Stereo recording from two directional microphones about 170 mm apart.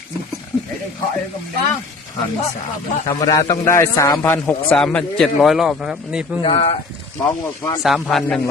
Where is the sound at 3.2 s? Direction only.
20° left (ahead or behind); by 6.4 s 5° right (ahead or behind).